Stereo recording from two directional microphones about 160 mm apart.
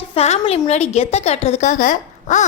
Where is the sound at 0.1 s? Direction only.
40° left (ahead or behind).